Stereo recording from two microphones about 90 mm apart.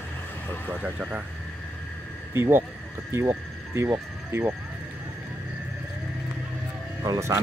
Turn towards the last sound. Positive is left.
turn(degrees=-35)  # may be behind; listen again after turning